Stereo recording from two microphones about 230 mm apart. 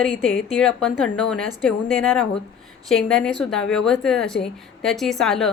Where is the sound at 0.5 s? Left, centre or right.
Centre.